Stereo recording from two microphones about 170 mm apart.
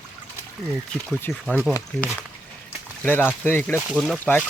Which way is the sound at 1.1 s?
5° left (ahead or behind).